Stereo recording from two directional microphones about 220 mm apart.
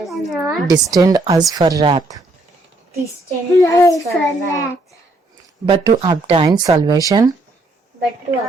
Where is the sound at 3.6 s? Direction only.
15° left (ahead or behind).